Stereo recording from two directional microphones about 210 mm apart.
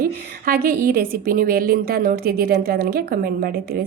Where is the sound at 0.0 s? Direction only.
45° right (ahead or behind).